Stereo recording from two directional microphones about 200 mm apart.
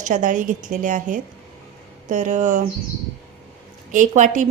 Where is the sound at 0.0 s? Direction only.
40° right (ahead or behind).